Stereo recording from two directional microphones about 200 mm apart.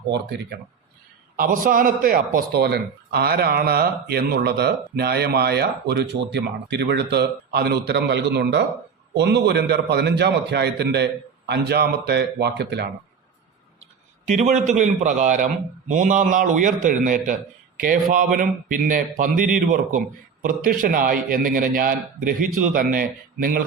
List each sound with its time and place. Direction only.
0.1 s a man's voice: 55° right (ahead or behind)
1.4 s a man's voice: 45° right (ahead or behind)
14.3 s a man's voice: 40° right (ahead or behind)